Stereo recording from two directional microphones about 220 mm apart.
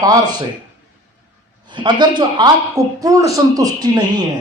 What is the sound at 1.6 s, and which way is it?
Speech, 20° right (ahead or behind).